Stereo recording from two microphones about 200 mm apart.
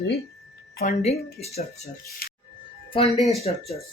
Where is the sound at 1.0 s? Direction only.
30° left (ahead or behind).